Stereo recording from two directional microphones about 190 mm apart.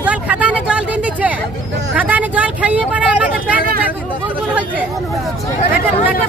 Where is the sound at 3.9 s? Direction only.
5° right (ahead or behind).